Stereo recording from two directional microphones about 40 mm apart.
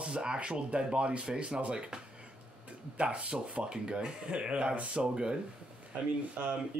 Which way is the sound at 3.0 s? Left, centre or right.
Right.